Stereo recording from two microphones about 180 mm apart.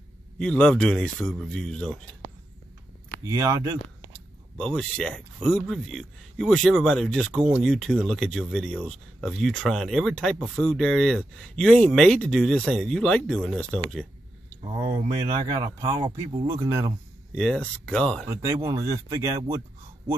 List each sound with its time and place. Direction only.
0.4 s speech: 5° left (ahead or behind)
3.3 s speech: 20° right (ahead or behind)
4.6 s speech: 5° left (ahead or behind)
15.5 s speech: 20° right (ahead or behind)
17.4 s speech: 5° left (ahead or behind)
18.3 s speech: 15° right (ahead or behind)